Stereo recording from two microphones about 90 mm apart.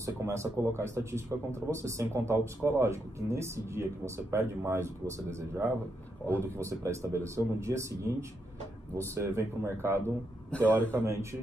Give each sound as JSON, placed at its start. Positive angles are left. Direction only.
{"t": 0.0, "sound": "a man's voice", "side_deg": -35}